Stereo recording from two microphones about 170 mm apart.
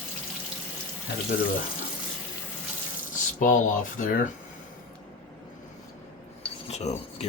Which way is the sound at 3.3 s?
50° left (ahead or behind).